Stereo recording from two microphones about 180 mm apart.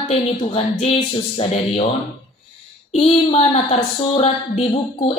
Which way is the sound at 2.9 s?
35° left (ahead or behind).